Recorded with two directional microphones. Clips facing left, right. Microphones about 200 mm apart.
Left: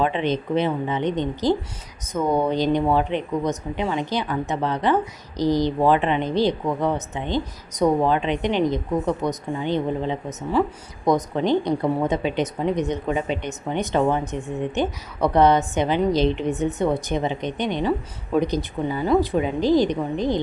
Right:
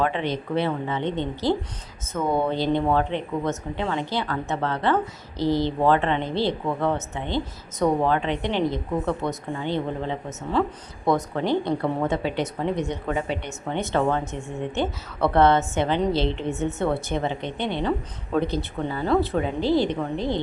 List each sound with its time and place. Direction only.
0.0 s a woman's voice: 20° left (ahead or behind)